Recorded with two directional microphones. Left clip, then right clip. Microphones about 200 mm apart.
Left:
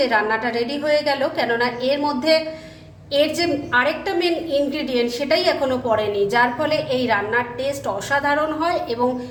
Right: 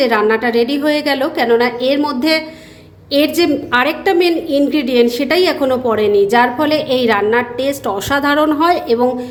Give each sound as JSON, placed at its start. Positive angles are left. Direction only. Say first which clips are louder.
{"t": 0.0, "sound": "a woman's voice", "louder": "right 6 dB", "side_deg": -45}